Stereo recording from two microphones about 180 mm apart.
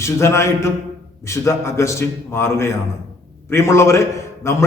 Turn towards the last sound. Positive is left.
turn(degrees=15)  # may be behind; listen again after turning